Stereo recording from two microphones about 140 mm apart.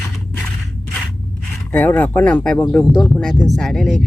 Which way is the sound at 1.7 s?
15° left (ahead or behind).